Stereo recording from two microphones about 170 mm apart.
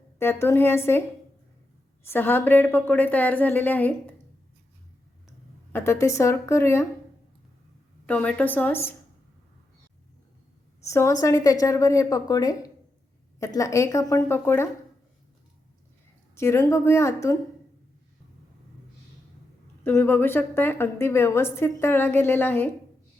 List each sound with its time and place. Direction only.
0.2 s a woman's voice: 15° left (ahead or behind)
2.0 s a woman's voice: 10° left (ahead or behind)
5.7 s a woman's voice: 15° left (ahead or behind)
8.0 s a woman's voice: 5° left (ahead or behind)
10.8 s a woman's voice: 15° left (ahead or behind)
16.3 s a woman's voice: 15° left (ahead or behind)
19.8 s a woman's voice: 15° left (ahead or behind)